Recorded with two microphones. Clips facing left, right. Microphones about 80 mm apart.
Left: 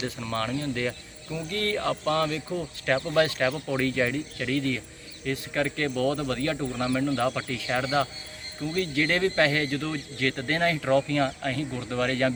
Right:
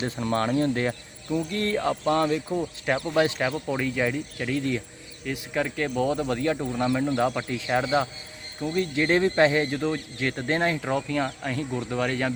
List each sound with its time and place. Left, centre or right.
0.0 s speech: right
5.2 s speech: centre